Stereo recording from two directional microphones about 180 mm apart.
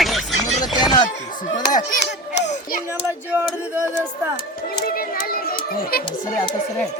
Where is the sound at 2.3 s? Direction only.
75° left (ahead or behind).